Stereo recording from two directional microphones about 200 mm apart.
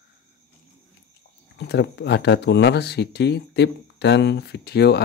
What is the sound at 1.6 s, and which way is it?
Speech, 60° left (ahead or behind).